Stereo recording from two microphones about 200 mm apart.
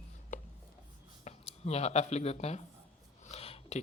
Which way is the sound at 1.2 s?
35° left (ahead or behind).